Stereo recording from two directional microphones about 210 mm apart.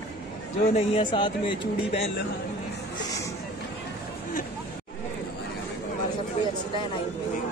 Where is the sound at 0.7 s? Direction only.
25° left (ahead or behind).